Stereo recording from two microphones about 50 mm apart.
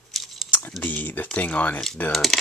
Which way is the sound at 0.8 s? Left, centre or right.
Left.